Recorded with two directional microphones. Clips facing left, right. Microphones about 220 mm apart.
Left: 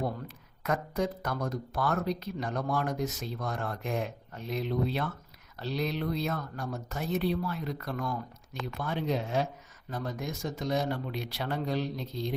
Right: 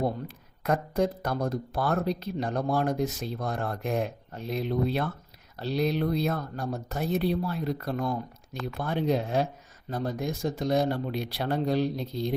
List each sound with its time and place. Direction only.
0.6 s speech: 35° right (ahead or behind)